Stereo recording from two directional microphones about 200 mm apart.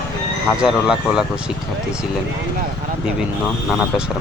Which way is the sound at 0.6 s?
5° right (ahead or behind).